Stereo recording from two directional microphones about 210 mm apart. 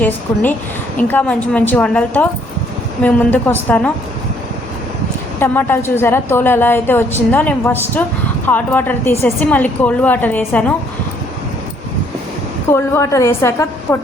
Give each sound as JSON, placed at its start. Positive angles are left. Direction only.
{"t": 0.9, "sound": "a woman's voice", "side_deg": 10}
{"t": 5.4, "sound": "a woman's voice", "side_deg": 10}
{"t": 12.6, "sound": "a woman's voice", "side_deg": 10}